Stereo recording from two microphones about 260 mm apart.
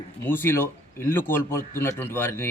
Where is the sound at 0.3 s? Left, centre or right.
Centre.